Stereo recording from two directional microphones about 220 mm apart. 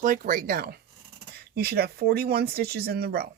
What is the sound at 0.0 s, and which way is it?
Speech, 40° right (ahead or behind).